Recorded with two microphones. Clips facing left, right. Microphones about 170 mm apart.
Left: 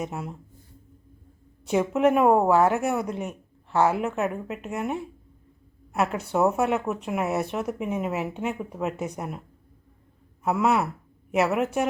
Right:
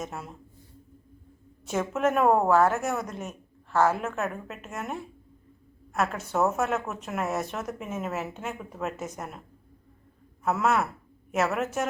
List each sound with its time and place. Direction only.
0.0 s speech: 15° left (ahead or behind)
1.6 s speech: 15° left (ahead or behind)
10.4 s speech: 15° left (ahead or behind)